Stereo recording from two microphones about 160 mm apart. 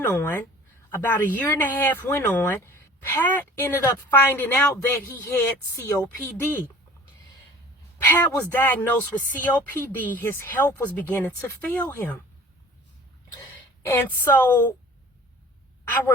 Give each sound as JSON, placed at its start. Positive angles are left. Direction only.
{"t": 0.0, "sound": "speech", "side_deg": 10}
{"t": 7.9, "sound": "speech", "side_deg": 15}
{"t": 13.8, "sound": "speech", "side_deg": 15}
{"t": 15.8, "sound": "speech", "side_deg": 15}